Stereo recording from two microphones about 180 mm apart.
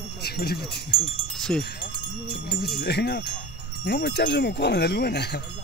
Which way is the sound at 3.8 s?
70° left (ahead or behind).